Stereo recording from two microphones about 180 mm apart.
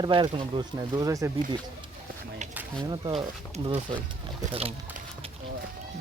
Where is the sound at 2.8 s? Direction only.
25° right (ahead or behind).